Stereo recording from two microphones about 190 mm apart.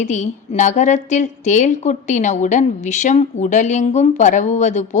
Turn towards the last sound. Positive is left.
turn(degrees=40)  # may be behind; listen again after turning